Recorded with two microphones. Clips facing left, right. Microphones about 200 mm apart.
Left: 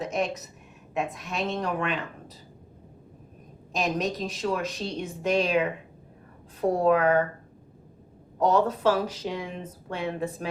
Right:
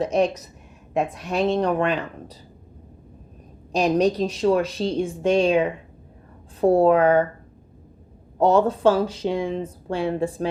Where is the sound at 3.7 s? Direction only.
35° right (ahead or behind).